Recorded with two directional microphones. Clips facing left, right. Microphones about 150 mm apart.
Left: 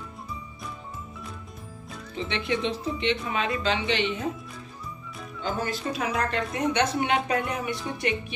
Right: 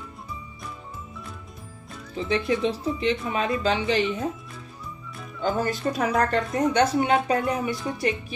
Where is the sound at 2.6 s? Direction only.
35° right (ahead or behind).